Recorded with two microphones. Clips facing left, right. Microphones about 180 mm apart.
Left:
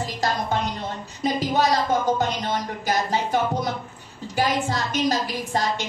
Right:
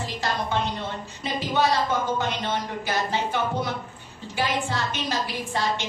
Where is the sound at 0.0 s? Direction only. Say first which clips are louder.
Left 3 dB; 40° left (ahead or behind).